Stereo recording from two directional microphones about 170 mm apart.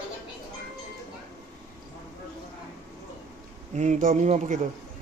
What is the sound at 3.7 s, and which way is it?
Speech, 45° right (ahead or behind).